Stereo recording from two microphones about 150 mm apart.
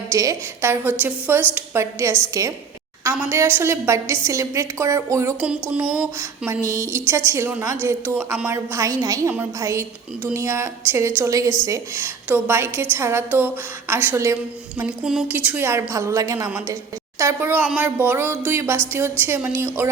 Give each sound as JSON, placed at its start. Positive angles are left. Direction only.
{"t": 0.1, "sound": "a woman's voice", "side_deg": -20}
{"t": 5.4, "sound": "a woman's voice", "side_deg": -10}
{"t": 6.5, "sound": "a woman's voice", "side_deg": -20}
{"t": 14.8, "sound": "a woman's voice", "side_deg": -5}